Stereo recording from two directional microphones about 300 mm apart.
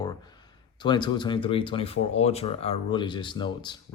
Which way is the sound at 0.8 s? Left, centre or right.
Centre.